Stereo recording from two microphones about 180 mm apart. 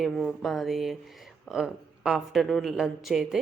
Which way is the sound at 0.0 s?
5° left (ahead or behind).